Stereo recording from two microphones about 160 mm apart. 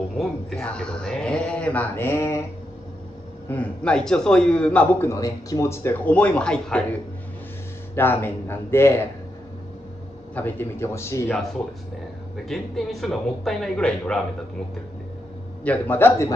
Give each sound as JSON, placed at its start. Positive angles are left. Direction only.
{"t": 0.2, "sound": "a man's voice", "side_deg": 5}
{"t": 3.4, "sound": "a man's voice", "side_deg": 10}
{"t": 10.3, "sound": "a man's voice", "side_deg": 15}
{"t": 11.2, "sound": "speech", "side_deg": 0}
{"t": 15.6, "sound": "a man's voice", "side_deg": 10}